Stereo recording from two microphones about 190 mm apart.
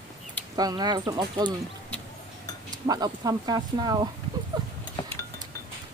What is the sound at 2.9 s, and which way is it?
Speech, 20° right (ahead or behind).